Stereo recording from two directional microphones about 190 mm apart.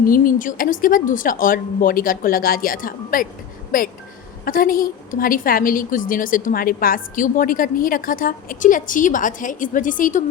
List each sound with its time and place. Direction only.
0.0 s a woman's voice: 45° left (ahead or behind)